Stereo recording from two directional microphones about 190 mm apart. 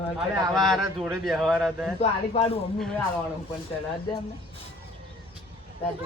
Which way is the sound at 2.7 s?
5° left (ahead or behind).